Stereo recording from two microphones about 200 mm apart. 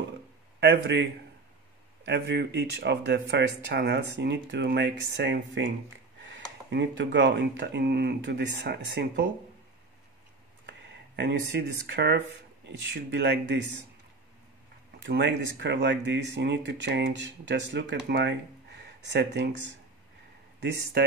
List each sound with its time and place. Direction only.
0.6 s a man's voice: 55° right (ahead or behind)
2.0 s speech: 55° right (ahead or behind)
10.7 s speech: 60° right (ahead or behind)
15.0 s speech: 60° right (ahead or behind)
20.6 s speech: 55° right (ahead or behind)